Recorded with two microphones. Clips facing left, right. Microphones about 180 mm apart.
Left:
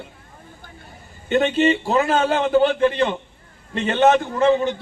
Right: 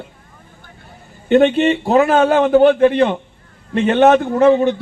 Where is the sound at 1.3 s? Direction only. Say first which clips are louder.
Right 5 dB; 55° right (ahead or behind).